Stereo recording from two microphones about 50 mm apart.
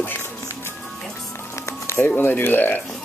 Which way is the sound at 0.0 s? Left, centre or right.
Left.